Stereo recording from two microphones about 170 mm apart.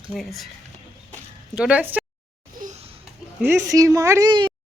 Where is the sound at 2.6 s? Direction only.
50° right (ahead or behind).